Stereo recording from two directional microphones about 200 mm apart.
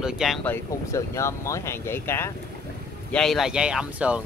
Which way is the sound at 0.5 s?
15° left (ahead or behind).